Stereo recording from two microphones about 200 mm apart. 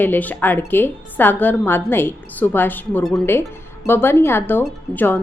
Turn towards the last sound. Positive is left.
turn(degrees=10)  # may be behind; listen again after turning